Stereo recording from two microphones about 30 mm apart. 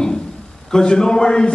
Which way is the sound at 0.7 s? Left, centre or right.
Left.